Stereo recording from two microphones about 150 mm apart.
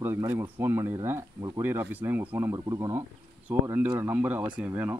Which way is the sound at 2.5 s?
25° right (ahead or behind).